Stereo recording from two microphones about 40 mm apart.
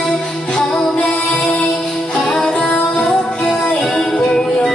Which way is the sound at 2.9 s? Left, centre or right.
Centre.